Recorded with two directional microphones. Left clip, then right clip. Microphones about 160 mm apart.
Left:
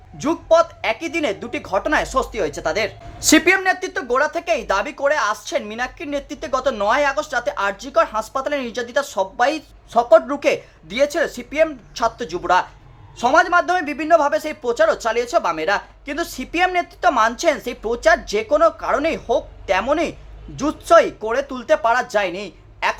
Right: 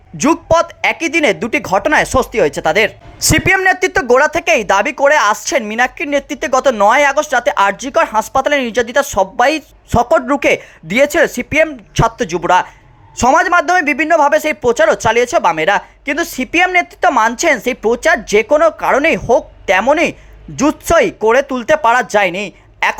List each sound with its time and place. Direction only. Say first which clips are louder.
0.2 s speech: right 4 dB; 45° right (ahead or behind)